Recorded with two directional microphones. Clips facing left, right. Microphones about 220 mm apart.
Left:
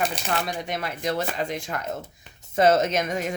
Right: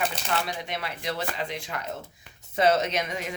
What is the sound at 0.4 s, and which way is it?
Speech, 45° left (ahead or behind).